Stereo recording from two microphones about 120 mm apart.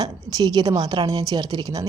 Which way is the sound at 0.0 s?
35° right (ahead or behind).